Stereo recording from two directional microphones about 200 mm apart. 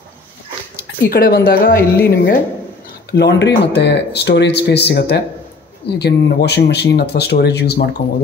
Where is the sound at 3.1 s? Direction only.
60° left (ahead or behind).